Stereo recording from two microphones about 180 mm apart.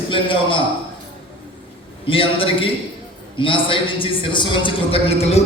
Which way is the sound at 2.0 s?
30° left (ahead or behind).